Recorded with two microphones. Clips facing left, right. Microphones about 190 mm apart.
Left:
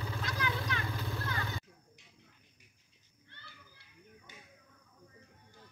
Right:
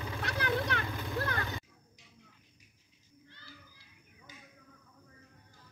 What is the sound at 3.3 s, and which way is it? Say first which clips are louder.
Children playing: right 2 dB; 60° left (ahead or behind).